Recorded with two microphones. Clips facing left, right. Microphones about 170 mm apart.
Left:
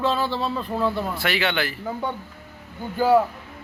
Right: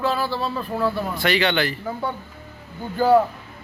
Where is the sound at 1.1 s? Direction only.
5° left (ahead or behind).